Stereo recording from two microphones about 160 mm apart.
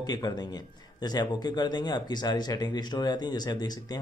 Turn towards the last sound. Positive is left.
turn(degrees=25)  # may be behind; listen again after turning